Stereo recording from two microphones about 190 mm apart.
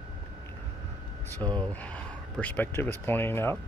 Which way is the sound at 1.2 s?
10° left (ahead or behind).